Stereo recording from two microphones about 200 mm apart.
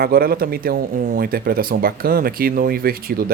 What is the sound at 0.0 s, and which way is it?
Speech, 50° right (ahead or behind).